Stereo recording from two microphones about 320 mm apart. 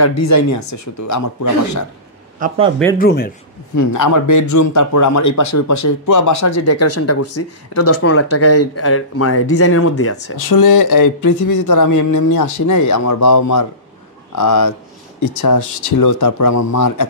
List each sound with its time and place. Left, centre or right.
0.0 s speech: left
3.0 s a man's voice: left
3.7 s speech: left
10.3 s speech: left